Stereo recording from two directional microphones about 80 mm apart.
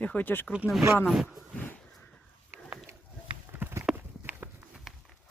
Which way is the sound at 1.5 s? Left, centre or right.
Left.